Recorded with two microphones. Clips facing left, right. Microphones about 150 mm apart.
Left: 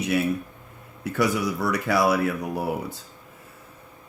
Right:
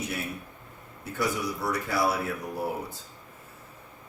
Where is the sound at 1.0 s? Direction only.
80° left.